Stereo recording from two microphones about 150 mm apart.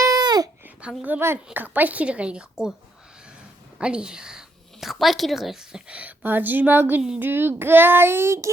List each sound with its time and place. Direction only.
0.0 s babbling: 25° right (ahead or behind)
0.6 s speech: 10° right (ahead or behind)
1.5 s child singing: 10° right (ahead or behind)
3.8 s speech: 5° right (ahead or behind)
7.0 s child singing: 10° right (ahead or behind)